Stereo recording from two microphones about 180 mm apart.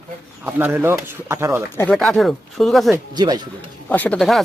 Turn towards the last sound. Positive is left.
turn(degrees=0)  # may be behind; listen again after turning